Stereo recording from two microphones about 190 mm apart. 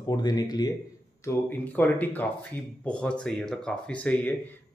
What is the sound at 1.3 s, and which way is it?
Speech, 10° left (ahead or behind).